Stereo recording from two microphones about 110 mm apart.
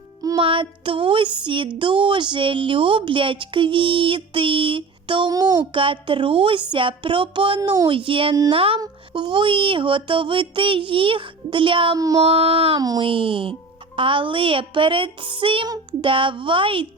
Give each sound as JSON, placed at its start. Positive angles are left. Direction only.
{"t": 0.3, "sound": "speech", "side_deg": -50}
{"t": 5.3, "sound": "a child's voice", "side_deg": -35}
{"t": 5.7, "sound": "speech", "side_deg": -50}
{"t": 8.5, "sound": "a sound", "side_deg": -55}
{"t": 8.8, "sound": "speech", "side_deg": -45}
{"t": 11.9, "sound": "a child's voice", "side_deg": -35}
{"t": 12.2, "sound": "a sound", "side_deg": -60}
{"t": 13.0, "sound": "speech", "side_deg": -55}
{"t": 15.6, "sound": "speech", "side_deg": -40}